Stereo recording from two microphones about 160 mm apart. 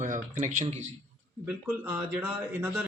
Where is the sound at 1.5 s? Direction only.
10° right (ahead or behind).